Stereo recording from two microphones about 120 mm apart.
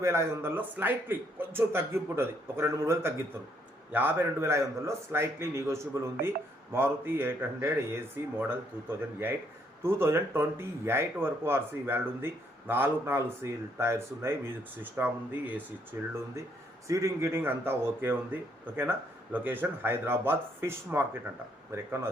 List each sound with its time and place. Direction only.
0.0 s speech: 20° right (ahead or behind)